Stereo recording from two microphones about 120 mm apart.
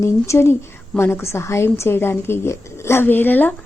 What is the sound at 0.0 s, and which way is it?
A woman's voice, 25° left (ahead or behind).